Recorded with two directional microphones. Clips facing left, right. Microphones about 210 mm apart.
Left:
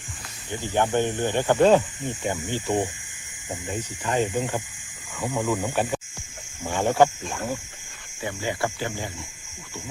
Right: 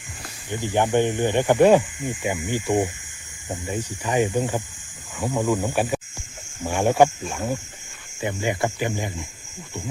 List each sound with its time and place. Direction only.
0.5 s speech: 15° right (ahead or behind)